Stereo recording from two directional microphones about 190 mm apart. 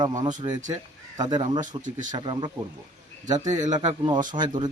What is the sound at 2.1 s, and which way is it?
Speech, 25° right (ahead or behind).